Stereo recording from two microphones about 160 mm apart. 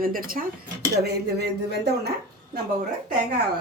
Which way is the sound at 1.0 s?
90° right.